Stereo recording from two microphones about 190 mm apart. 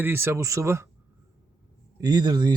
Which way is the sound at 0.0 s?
10° right (ahead or behind).